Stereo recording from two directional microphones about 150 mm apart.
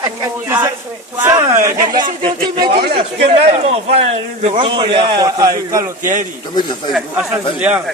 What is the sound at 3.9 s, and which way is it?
A man's voice, 45° right (ahead or behind).